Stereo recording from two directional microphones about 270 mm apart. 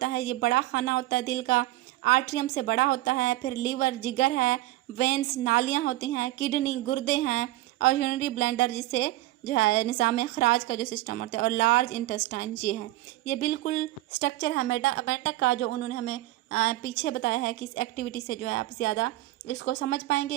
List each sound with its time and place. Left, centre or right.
0.0 s a woman's voice: left